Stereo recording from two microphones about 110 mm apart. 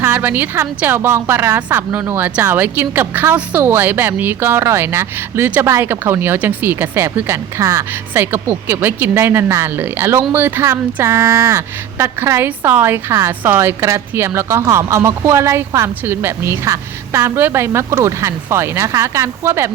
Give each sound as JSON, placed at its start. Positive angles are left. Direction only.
{"t": 0.0, "sound": "speech", "side_deg": -15}